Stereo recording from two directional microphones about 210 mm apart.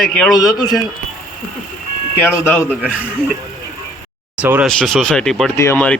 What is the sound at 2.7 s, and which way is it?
Speech, 5° right (ahead or behind).